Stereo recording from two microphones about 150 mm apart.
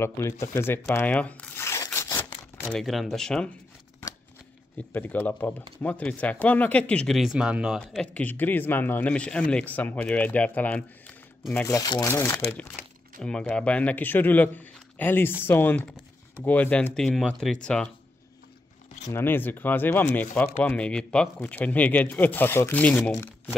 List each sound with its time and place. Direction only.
0.6 s speech: 15° left (ahead or behind)
2.0 s a sound: 20° left (ahead or behind)
2.6 s speech: 5° left (ahead or behind)
4.7 s speech: 10° left (ahead or behind); by 7.8 s 5° right (ahead or behind)
7.9 s speech: 5° left (ahead or behind)
11.6 s speech: 25° left (ahead or behind); by 17.8 s 5° left (ahead or behind)
19.0 s speech: 15° left (ahead or behind)